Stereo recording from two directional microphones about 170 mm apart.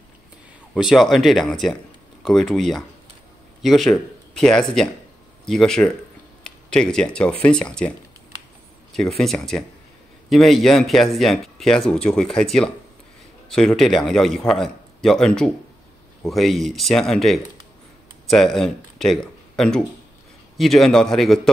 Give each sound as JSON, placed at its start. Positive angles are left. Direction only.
{"t": 0.7, "sound": "speech", "side_deg": 0}
{"t": 8.9, "sound": "speech", "side_deg": 0}